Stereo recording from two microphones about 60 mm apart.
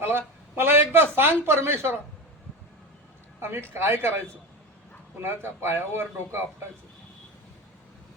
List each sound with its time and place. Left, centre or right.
0.0 s a sound: right
3.4 s speech: right
5.2 s a man's voice: right